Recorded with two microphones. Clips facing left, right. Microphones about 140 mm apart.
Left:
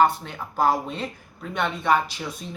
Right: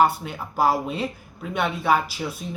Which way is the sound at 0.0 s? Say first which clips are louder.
Even; 5° right (ahead or behind).